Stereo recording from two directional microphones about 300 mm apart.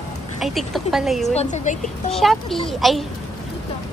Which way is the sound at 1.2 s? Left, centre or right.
Left.